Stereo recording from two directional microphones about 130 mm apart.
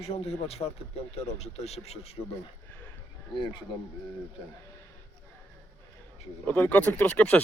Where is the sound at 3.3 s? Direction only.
40° left (ahead or behind).